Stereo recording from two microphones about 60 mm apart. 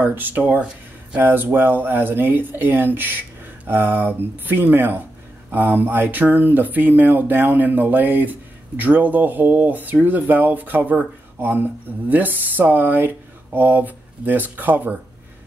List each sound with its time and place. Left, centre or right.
0.0 s speech: right